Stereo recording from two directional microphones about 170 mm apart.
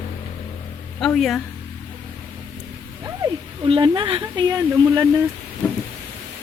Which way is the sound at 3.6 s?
30° right (ahead or behind).